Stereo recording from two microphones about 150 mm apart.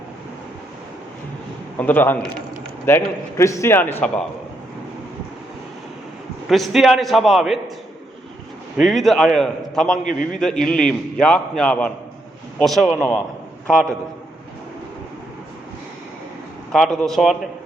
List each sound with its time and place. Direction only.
1.8 s a man's voice: 15° left (ahead or behind)
6.5 s a man's voice: centre (ahead or behind)
8.8 s a man's voice: centre (ahead or behind)
10.0 s a man's voice: 60° left (ahead or behind)
10.4 s a man's voice: 5° left (ahead or behind)
16.7 s a man's voice: 5° left (ahead or behind)